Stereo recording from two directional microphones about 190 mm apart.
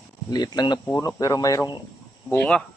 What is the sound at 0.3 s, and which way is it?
Speech, 20° left (ahead or behind).